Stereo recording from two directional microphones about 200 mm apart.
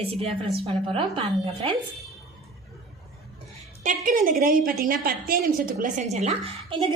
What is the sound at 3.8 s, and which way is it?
A woman's voice, 40° right (ahead or behind).